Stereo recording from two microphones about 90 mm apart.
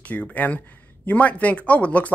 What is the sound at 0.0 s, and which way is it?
Speech, 15° left (ahead or behind).